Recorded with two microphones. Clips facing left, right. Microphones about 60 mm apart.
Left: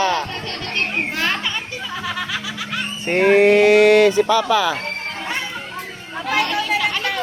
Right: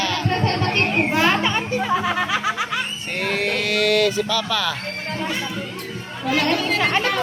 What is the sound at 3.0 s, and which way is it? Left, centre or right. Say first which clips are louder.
Speech: left 13 dB; left.